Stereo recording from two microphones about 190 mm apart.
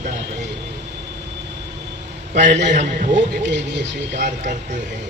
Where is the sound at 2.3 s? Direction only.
40° right (ahead or behind).